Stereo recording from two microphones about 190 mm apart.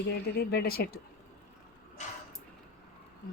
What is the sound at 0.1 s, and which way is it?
Speech, 55° left (ahead or behind).